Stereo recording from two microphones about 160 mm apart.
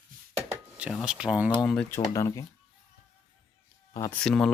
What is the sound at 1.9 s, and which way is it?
Speech, 20° left (ahead or behind).